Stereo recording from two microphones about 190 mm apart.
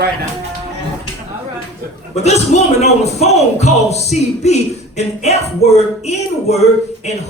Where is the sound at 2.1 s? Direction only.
35° left (ahead or behind).